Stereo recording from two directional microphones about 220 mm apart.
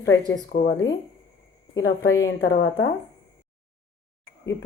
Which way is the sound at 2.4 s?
60° left (ahead or behind).